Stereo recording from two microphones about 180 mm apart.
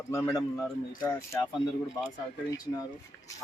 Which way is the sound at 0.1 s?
15° left (ahead or behind).